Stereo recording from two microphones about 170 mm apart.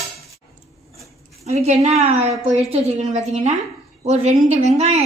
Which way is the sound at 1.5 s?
40° right (ahead or behind).